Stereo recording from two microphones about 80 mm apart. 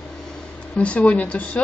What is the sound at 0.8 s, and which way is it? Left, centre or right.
Speech, centre.